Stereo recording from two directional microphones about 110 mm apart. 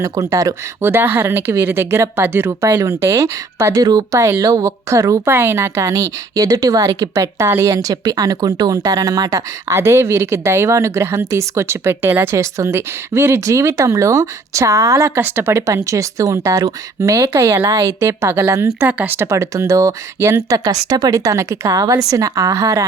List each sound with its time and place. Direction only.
0.0 s speech: 30° right (ahead or behind)